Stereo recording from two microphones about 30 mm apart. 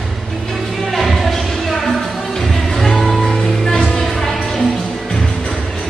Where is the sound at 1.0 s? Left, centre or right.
Centre.